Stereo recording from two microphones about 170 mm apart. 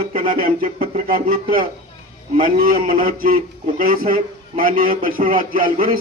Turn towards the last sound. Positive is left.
turn(degrees=-55)  # may be behind; listen again after turning